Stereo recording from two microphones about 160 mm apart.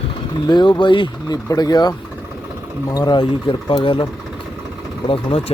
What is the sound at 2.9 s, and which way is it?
Speech, 25° left (ahead or behind).